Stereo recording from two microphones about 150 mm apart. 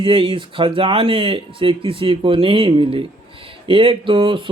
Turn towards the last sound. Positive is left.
turn(degrees=-35)  # may be behind; listen again after turning